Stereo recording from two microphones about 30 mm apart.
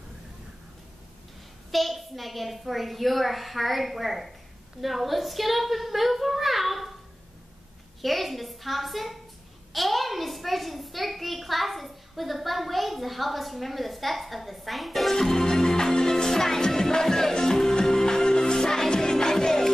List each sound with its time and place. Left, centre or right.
1.7 s a child's voice: centre
8.0 s a child's voice: centre
15.1 s music: centre